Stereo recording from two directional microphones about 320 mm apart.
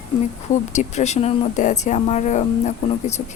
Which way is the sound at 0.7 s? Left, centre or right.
Left.